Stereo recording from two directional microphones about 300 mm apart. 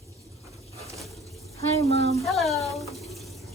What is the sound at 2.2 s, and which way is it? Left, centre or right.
Water tap, centre.